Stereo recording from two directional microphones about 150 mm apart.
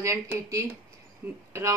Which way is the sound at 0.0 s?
20° right (ahead or behind).